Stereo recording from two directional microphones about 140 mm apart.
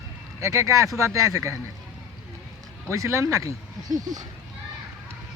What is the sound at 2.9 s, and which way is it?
Speech, 20° right (ahead or behind).